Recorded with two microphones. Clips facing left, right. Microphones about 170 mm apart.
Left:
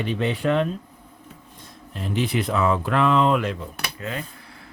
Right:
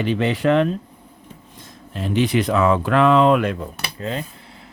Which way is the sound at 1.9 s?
80° right.